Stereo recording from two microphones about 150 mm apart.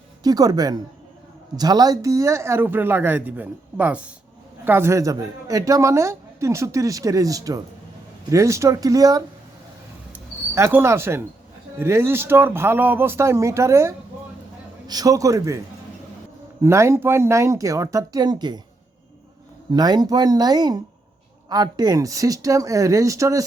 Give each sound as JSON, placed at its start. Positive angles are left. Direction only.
{"t": 0.2, "sound": "a woman's voice", "side_deg": -25}
{"t": 10.1, "sound": "a sound", "side_deg": -15}
{"t": 11.8, "sound": "a woman's voice", "side_deg": -15}
{"t": 16.6, "sound": "a woman's voice", "side_deg": -20}
{"t": 19.7, "sound": "a woman's voice", "side_deg": -25}